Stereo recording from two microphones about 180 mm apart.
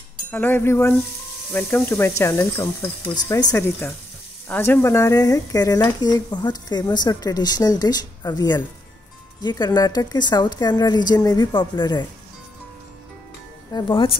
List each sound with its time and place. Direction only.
0.3 s speech: 10° left (ahead or behind)
13.7 s speech: 30° left (ahead or behind)